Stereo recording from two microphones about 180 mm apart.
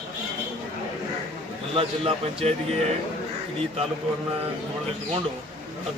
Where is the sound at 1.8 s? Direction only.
30° right (ahead or behind).